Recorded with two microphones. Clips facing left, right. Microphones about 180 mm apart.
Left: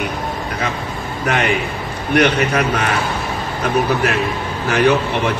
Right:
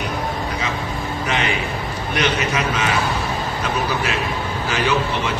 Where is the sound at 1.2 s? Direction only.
55° left (ahead or behind).